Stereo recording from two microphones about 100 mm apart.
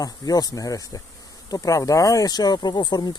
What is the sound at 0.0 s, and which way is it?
Speech, 35° left (ahead or behind).